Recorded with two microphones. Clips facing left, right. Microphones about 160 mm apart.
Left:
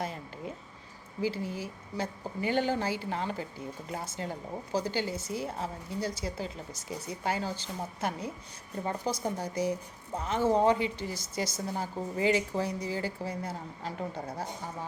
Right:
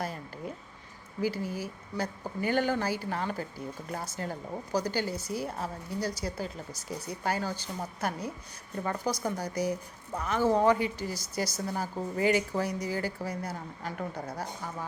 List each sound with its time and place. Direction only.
1.2 s a woman's voice: 25° left (ahead or behind)